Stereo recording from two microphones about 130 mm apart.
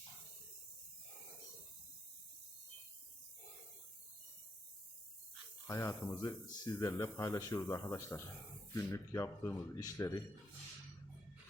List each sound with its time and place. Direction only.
5.6 s speech: 20° left (ahead or behind)